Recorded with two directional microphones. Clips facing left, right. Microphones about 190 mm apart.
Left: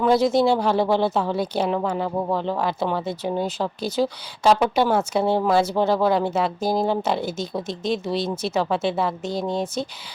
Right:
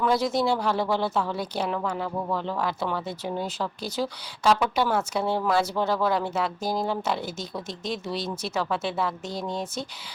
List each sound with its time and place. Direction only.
0.0 s speech: 25° left (ahead or behind)